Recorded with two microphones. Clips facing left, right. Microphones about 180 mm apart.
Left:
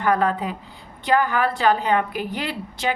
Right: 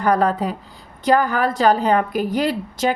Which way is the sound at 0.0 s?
40° right (ahead or behind).